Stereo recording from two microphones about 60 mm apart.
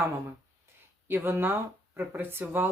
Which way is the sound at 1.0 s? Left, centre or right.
Right.